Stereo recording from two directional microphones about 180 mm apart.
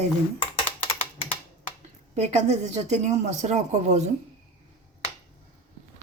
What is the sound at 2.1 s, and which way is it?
A woman's voice, 40° right (ahead or behind).